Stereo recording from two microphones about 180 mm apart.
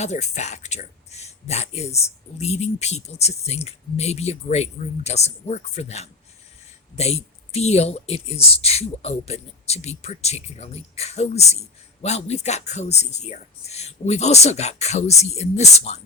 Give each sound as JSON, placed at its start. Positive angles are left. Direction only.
{"t": 0.0, "sound": "speech", "side_deg": 40}